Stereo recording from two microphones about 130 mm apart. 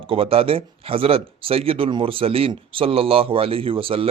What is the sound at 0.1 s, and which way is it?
Speech, 45° right (ahead or behind).